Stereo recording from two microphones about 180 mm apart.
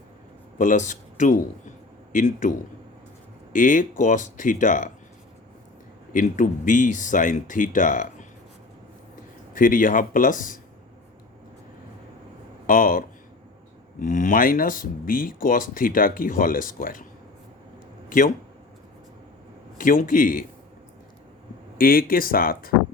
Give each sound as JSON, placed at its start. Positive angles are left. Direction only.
{"t": 0.6, "sound": "speech", "side_deg": 45}
{"t": 3.5, "sound": "speech", "side_deg": 45}
{"t": 6.1, "sound": "speech", "side_deg": 45}
{"t": 9.5, "sound": "speech", "side_deg": 50}
{"t": 12.6, "sound": "speech", "side_deg": 50}
{"t": 19.8, "sound": "speech", "side_deg": 50}
{"t": 21.8, "sound": "speech", "side_deg": 55}